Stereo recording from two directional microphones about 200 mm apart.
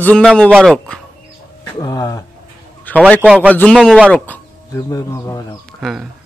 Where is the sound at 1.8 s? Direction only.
15° left (ahead or behind).